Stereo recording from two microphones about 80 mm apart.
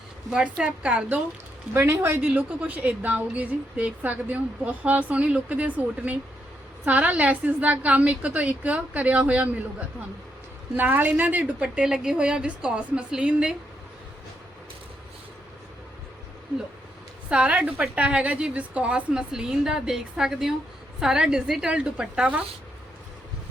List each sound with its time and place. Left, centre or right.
0.3 s a woman's voice: centre
1.7 s a woman's voice: right
2.2 s a woman's voice: centre
17.2 s a woman's voice: centre